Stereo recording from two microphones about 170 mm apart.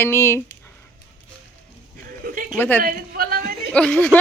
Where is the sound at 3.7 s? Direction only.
10° left (ahead or behind).